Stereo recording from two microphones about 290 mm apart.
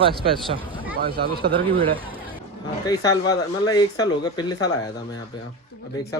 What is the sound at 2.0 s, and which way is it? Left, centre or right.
Chatter, centre.